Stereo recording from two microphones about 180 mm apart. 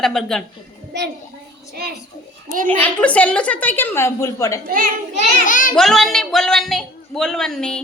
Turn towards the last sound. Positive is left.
turn(degrees=5)  # may be behind; listen again after turning